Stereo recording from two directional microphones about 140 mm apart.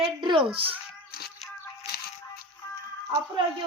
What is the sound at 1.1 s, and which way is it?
Music, 90° left.